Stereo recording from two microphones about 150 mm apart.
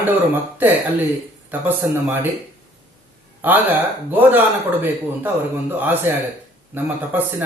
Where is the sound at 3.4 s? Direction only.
10° right (ahead or behind).